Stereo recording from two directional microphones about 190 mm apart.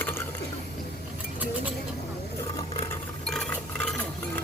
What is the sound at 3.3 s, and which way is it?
Stir, centre (ahead or behind).